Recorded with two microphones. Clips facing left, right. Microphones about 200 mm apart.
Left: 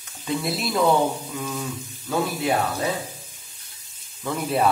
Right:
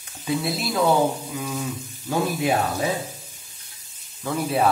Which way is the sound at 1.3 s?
10° right (ahead or behind).